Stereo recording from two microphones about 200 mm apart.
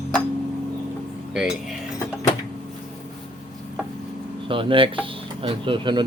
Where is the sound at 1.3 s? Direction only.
5° right (ahead or behind).